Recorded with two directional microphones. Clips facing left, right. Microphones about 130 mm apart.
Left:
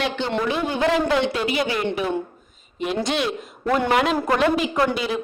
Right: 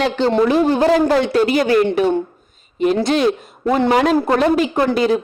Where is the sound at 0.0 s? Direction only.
40° right (ahead or behind).